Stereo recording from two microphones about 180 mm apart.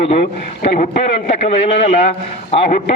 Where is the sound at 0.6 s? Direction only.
35° left (ahead or behind).